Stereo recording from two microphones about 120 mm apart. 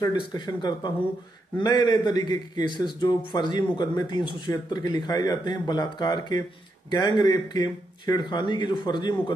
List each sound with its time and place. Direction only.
0.0 s speech: 35° left (ahead or behind)